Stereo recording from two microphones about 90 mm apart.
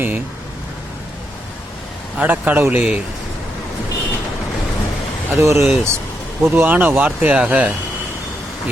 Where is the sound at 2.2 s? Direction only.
20° right (ahead or behind).